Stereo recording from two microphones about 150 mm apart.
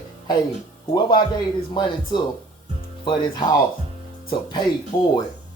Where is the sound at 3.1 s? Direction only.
30° left (ahead or behind).